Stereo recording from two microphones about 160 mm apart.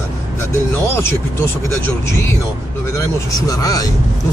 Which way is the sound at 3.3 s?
20° left (ahead or behind).